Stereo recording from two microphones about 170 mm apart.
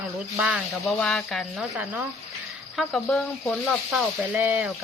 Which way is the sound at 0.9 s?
5° left (ahead or behind).